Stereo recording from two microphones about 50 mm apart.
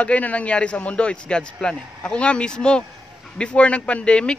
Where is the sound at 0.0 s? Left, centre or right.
Left.